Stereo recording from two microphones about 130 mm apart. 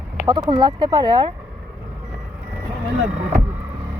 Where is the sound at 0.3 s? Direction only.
35° right (ahead or behind).